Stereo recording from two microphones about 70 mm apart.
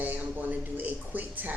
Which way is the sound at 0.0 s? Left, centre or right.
Right.